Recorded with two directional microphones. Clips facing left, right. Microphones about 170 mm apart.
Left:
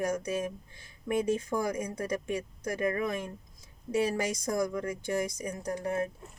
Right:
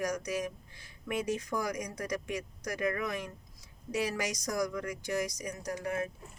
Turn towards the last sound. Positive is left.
turn(degrees=30)  # may be behind; listen again after turning